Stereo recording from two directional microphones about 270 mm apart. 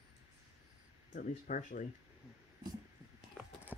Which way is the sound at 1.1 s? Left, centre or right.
Left.